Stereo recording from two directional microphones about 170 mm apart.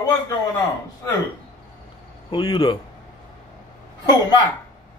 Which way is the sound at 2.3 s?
25° left (ahead or behind).